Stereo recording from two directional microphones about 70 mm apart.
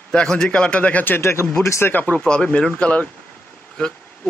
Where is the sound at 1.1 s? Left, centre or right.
Left.